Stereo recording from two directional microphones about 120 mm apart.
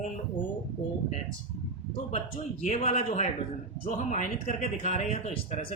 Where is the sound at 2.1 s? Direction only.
75° left (ahead or behind).